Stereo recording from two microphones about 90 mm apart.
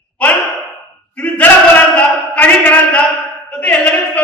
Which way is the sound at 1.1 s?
15° left (ahead or behind).